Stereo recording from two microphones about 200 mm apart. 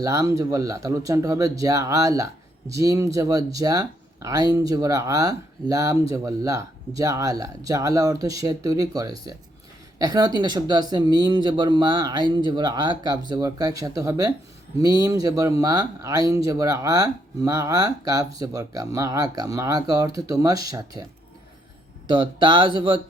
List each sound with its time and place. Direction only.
0.0 s speech: 15° right (ahead or behind)
22.0 s speech: 25° right (ahead or behind)